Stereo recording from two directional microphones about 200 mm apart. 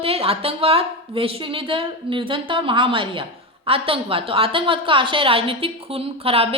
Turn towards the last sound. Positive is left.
turn(degrees=-30)  # may be behind; listen again after turning